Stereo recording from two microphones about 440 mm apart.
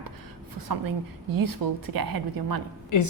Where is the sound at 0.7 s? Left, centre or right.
Right.